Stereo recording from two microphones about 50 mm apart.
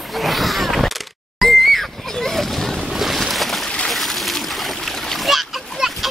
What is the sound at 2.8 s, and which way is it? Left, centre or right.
Boat, centre.